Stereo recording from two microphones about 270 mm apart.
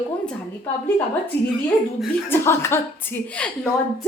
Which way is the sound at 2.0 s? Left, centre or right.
Centre.